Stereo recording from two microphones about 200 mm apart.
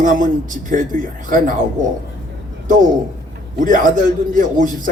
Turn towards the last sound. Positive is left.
turn(degrees=-40)  # may be behind; listen again after turning